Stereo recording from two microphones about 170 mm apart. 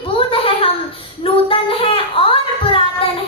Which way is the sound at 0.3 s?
30° left (ahead or behind).